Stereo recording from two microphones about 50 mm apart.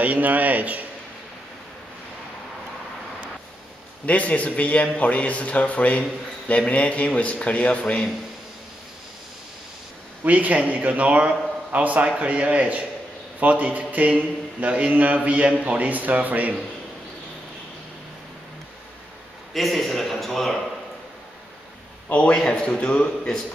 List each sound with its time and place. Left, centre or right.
0.0 s a man's voice: right
4.0 s a man's voice: left
10.2 s a man's voice: right
19.5 s a man's voice: centre
22.3 s a man's voice: centre
23.0 s a man's voice: centre